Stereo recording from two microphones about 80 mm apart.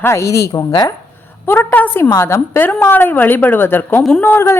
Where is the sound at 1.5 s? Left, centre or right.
Left.